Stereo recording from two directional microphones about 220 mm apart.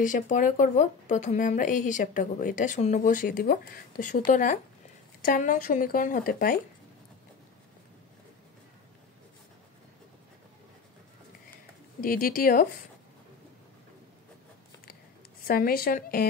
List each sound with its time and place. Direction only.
0.0 s a woman's voice: 35° left (ahead or behind)
12.0 s a woman's voice: 40° left (ahead or behind)
15.4 s a woman's voice: 40° left (ahead or behind)